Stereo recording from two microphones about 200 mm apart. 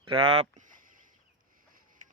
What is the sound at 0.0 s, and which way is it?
Speech, 25° right (ahead or behind).